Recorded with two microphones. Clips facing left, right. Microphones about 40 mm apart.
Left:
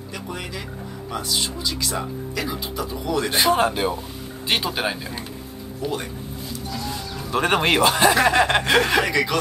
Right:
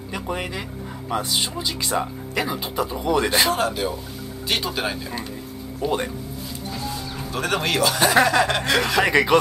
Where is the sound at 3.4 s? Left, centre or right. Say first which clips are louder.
Left 3 dB; left; by 5.3 s centre.